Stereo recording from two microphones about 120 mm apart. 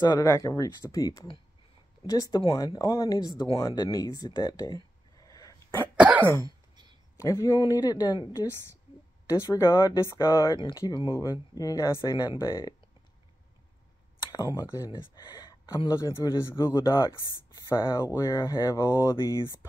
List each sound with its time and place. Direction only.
0.0 s speech: 25° left (ahead or behind)
5.3 s dog: 30° left (ahead or behind)
5.9 s cough: 10° right (ahead or behind)
6.3 s cough: 30° right (ahead or behind)
7.2 s speech: 30° left (ahead or behind)
10.5 s speech: 35° left (ahead or behind)
11.1 s speech: 30° left (ahead or behind)
12.4 s speech: 25° left (ahead or behind)
14.3 s speech: 30° left (ahead or behind)
16.4 s speech: 25° left (ahead or behind)
18.9 s speech: 35° left (ahead or behind)